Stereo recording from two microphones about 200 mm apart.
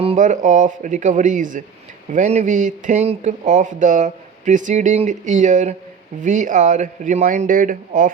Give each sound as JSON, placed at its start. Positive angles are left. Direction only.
{"t": 0.0, "sound": "speech", "side_deg": -35}